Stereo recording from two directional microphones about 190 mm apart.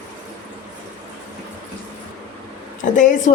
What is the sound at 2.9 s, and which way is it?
Speech, 40° left (ahead or behind).